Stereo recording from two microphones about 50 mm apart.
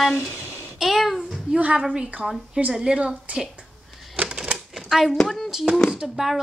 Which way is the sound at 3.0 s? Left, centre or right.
Right.